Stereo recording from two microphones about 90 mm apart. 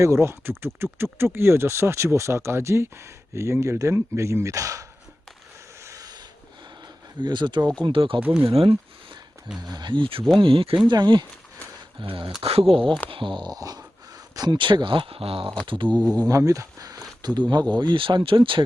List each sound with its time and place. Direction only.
0.0 s speech: 30° right (ahead or behind)
5.8 s a sound: 40° right (ahead or behind)
7.2 s speech: 60° right (ahead or behind); by 8.7 s 75° right (ahead or behind)
9.6 s speech: 50° right (ahead or behind); by 10.8 s 85° right
10.8 s speech: 55° right (ahead or behind)
11.9 s speech: 70° right (ahead or behind)
12.4 s speech: 90° right
13.1 s speech: 70° right (ahead or behind); by 15.5 s 90° right
15.6 s speech: 65° right (ahead or behind)
15.9 s speech: 15° left (ahead or behind)
16.3 s speech: 35° right (ahead or behind); by 18.6 s 70° right (ahead or behind)